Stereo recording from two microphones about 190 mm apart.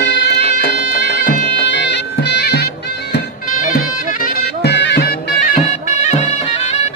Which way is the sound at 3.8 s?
50° left (ahead or behind).